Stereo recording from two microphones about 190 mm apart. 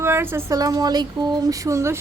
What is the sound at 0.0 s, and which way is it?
A woman's voice, 10° right (ahead or behind).